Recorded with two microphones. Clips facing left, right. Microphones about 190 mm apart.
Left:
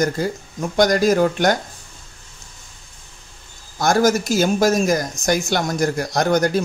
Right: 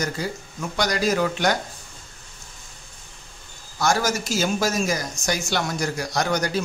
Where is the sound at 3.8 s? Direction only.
50° left (ahead or behind).